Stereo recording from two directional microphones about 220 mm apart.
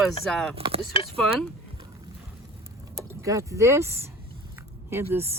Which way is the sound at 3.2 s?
15° right (ahead or behind).